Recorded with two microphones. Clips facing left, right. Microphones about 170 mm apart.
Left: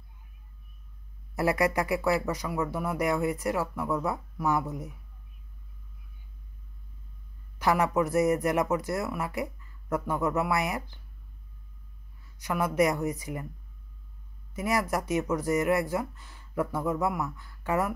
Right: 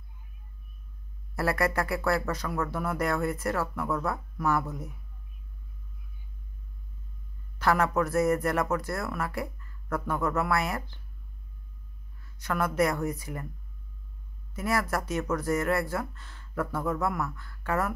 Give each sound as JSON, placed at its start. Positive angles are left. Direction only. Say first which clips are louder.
{"t": 1.3, "sound": "speech", "louder": "left 2 dB", "side_deg": 15}
{"t": 7.5, "sound": "speech", "louder": "even", "side_deg": 15}
{"t": 12.4, "sound": "speech", "louder": "left 1 dB", "side_deg": 15}
{"t": 14.5, "sound": "speech", "louder": "left 1 dB", "side_deg": 15}